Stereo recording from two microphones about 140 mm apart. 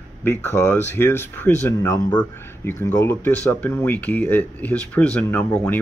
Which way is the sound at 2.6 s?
15° left (ahead or behind).